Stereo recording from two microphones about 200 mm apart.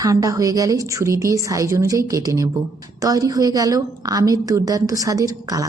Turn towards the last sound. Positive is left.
turn(degrees=-15)  # may be behind; listen again after turning